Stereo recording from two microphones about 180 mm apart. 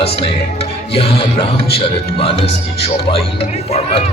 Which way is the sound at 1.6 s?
30° left (ahead or behind).